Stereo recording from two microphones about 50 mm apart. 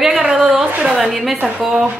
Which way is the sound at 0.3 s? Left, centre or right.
Centre.